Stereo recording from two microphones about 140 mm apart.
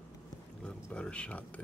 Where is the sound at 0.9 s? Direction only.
5° left (ahead or behind).